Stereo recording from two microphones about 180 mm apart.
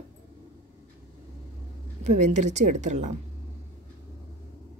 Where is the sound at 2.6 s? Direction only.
50° right (ahead or behind).